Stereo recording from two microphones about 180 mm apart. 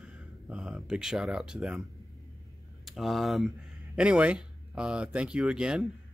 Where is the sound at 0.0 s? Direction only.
5° right (ahead or behind).